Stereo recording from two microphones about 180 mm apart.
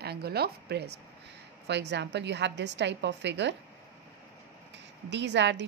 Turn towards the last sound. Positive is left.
turn(degrees=-75)  # may be behind; listen again after turning